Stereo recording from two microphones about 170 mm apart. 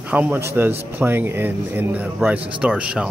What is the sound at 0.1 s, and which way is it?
Speech, 10° right (ahead or behind).